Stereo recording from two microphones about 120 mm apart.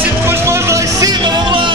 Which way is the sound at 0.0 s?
20° right (ahead or behind).